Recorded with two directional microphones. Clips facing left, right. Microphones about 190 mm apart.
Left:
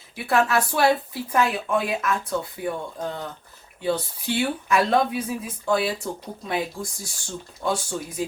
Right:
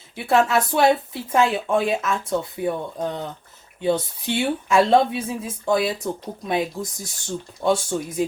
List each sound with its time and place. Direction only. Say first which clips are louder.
0.3 s speech: right 3 dB; 20° right (ahead or behind)